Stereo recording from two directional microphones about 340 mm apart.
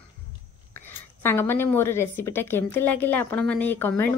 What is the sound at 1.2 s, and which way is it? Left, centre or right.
Speech, centre.